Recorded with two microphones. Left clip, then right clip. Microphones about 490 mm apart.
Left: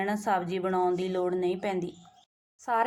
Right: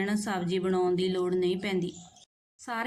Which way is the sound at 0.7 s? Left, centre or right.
Right.